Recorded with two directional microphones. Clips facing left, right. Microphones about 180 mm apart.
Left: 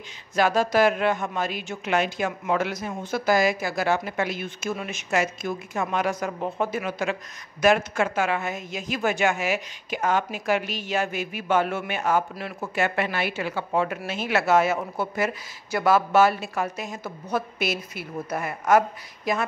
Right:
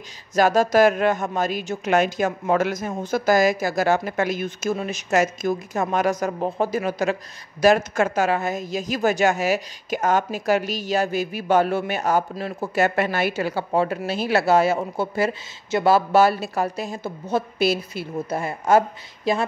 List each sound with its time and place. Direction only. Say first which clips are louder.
0.3 s a woman's voice: right 4 dB; 40° right (ahead or behind)